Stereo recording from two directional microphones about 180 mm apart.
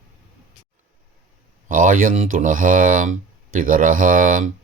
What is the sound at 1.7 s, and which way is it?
Speech, 50° right (ahead or behind).